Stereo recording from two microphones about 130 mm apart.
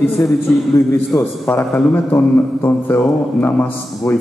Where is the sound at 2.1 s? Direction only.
20° left (ahead or behind).